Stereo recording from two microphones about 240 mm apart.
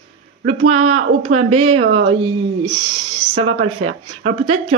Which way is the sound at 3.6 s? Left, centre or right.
Right.